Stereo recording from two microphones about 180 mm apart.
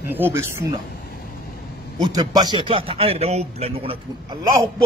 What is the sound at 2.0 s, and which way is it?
Speech, 25° right (ahead or behind).